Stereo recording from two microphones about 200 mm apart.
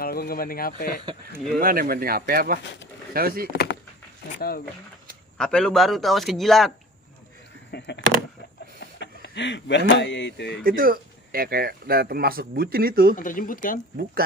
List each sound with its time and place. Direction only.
0.0 s speech: 50° left (ahead or behind)
1.6 s speech: 45° right (ahead or behind)
4.4 s speech: 50° left (ahead or behind)
5.4 s a man's voice: 5° left (ahead or behind)
7.7 s speech: 60° left (ahead or behind)
9.0 s speech: 60° left (ahead or behind)
10.6 s speech: 45° right (ahead or behind)
13.1 s speech: 40° left (ahead or behind)